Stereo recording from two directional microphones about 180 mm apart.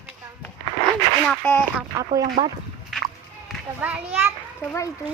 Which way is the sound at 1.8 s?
20° right (ahead or behind).